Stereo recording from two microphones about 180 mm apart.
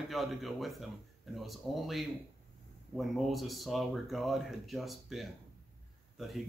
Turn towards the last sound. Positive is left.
turn(degrees=0)  # may be behind; listen again after turning